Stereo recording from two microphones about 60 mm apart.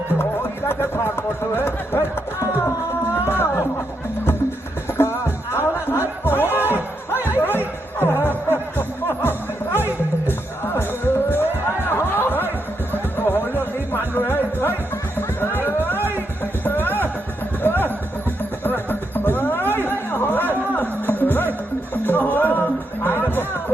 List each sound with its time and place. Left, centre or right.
0.7 s speech: left
3.2 s speech: left
4.9 s music: left
10.8 s music: left